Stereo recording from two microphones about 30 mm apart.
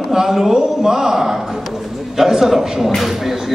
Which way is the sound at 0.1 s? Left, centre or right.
Centre.